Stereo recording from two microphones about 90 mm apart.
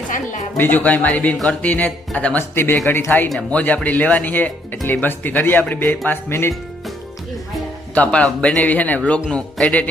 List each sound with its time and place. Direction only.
0.5 s speech: 20° left (ahead or behind)
3.2 s speech: 10° left (ahead or behind)
7.9 s speech: 15° left (ahead or behind)